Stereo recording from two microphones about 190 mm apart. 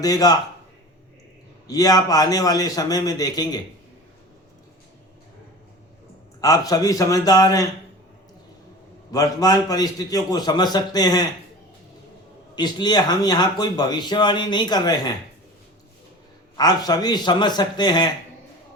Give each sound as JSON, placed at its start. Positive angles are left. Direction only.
{"t": 0.0, "sound": "speech", "side_deg": 20}
{"t": 1.6, "sound": "speech", "side_deg": 20}
{"t": 6.4, "sound": "speech", "side_deg": 20}
{"t": 9.1, "sound": "speech", "side_deg": 20}
{"t": 12.5, "sound": "speech", "side_deg": 20}
{"t": 16.6, "sound": "speech", "side_deg": 20}